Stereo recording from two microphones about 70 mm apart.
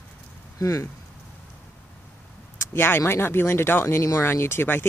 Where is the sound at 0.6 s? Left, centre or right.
Left.